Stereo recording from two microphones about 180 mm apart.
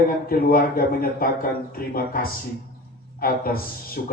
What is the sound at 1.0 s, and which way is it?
Speech, 55° left (ahead or behind).